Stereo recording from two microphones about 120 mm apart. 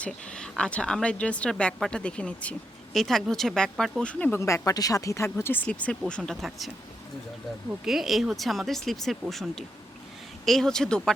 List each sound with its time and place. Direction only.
0.0 s a woman's voice: 10° left (ahead or behind)
4.4 s speech: 25° left (ahead or behind)
5.6 s a woman's voice: 5° left (ahead or behind)
7.7 s speech: centre (ahead or behind)